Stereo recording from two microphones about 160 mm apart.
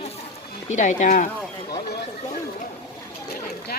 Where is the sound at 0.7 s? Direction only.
50° left (ahead or behind).